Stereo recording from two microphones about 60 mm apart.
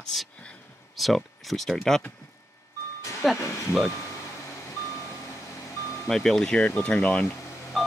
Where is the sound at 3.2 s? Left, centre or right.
Centre.